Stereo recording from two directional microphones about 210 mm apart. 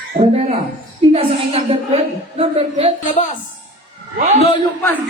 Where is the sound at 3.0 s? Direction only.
35° left (ahead or behind).